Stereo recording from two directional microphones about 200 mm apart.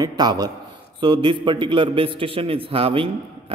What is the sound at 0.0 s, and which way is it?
A man's voice, 20° right (ahead or behind).